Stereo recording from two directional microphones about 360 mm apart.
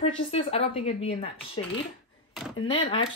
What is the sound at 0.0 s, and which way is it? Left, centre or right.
Speech, centre.